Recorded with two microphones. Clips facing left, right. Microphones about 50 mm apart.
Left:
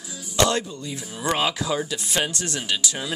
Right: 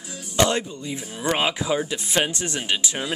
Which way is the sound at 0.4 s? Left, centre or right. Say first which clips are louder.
Even; right.